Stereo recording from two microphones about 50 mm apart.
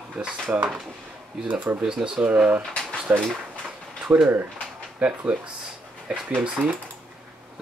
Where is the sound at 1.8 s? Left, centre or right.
Centre.